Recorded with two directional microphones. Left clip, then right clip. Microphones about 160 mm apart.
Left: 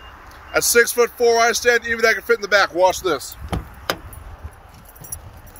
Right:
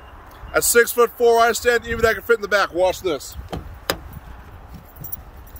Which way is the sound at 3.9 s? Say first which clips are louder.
Even; 30° left (ahead or behind).